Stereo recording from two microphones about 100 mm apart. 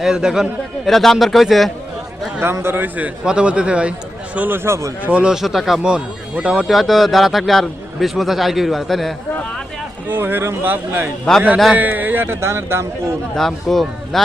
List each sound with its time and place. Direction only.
0.0 s a man's voice: 5° right (ahead or behind)
2.4 s speech: 25° right (ahead or behind)
5.0 s speech: 10° right (ahead or behind)
6.7 s a man's voice: centre (ahead or behind)
10.1 s speech: 20° right (ahead or behind)
11.5 s a man's voice: 5° right (ahead or behind)
11.8 s speech: 20° right (ahead or behind)
13.3 s a man's voice: 5° left (ahead or behind)